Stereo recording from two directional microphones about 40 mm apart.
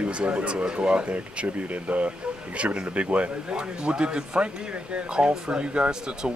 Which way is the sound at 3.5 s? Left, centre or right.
Right.